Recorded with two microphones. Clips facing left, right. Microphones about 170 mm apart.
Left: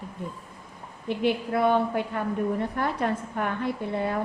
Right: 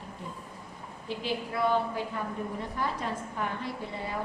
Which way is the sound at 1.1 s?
60° left (ahead or behind).